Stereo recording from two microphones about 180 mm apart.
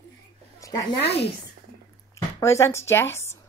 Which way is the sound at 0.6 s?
20° left (ahead or behind).